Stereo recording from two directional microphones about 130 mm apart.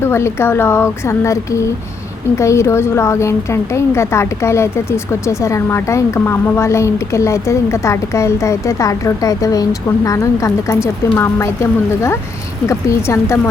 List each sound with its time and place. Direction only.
0.0 s a woman's voice: 20° left (ahead or behind)